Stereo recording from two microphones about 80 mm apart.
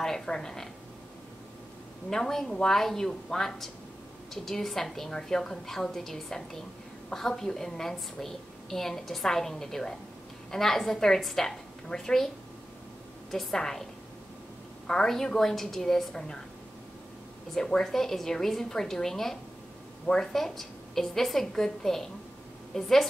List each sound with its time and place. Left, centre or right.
0.0 s a woman's voice: centre
2.0 s a woman's voice: centre
13.3 s a woman's voice: centre
14.9 s a woman's voice: centre
17.6 s a woman's voice: centre